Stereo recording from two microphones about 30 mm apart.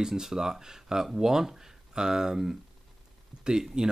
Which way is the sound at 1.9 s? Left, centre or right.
Right.